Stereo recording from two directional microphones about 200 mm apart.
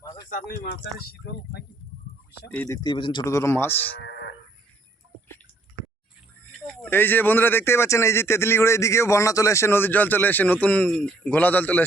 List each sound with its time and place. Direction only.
0.0 s a sound: 20° left (ahead or behind)
0.3 s speech: 45° left (ahead or behind)
2.5 s speech: 10° left (ahead or behind)
4.0 s livestock: 60° left (ahead or behind)
6.8 s speech: 10° left (ahead or behind)